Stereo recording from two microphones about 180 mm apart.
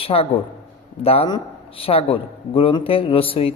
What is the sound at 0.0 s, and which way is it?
Speech, 30° left (ahead or behind).